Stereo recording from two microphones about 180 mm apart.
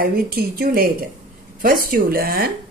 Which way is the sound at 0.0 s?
55° right (ahead or behind).